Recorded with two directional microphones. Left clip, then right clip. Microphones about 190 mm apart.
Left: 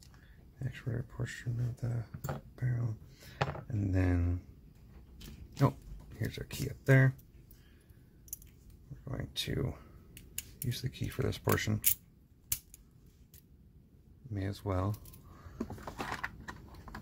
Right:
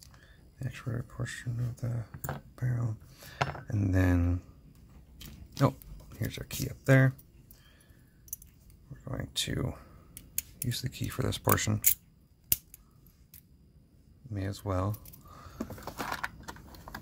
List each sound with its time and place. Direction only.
0.6 s speech: 15° right (ahead or behind)
2.2 s speech: 20° right (ahead or behind)
5.5 s a sound: 15° right (ahead or behind)
6.6 s speech: 15° right (ahead or behind)
9.0 s speech: 15° right (ahead or behind)
14.3 s speech: 10° right (ahead or behind)
15.5 s power windows: 30° right (ahead or behind)